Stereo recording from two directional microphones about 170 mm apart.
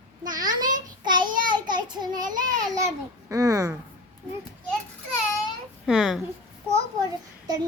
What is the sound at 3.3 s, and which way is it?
Speech, 20° right (ahead or behind).